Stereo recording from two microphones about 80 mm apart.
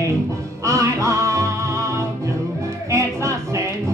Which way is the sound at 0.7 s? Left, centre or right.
Right.